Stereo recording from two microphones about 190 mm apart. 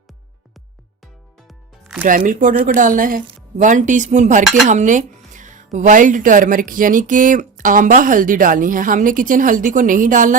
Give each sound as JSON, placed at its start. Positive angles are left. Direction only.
{"t": 2.0, "sound": "a woman's voice", "side_deg": -45}